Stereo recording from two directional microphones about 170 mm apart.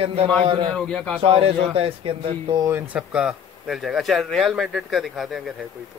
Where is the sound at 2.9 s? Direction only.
5° right (ahead or behind).